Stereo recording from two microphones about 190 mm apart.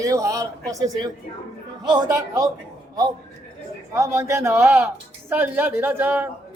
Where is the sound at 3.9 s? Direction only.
15° right (ahead or behind).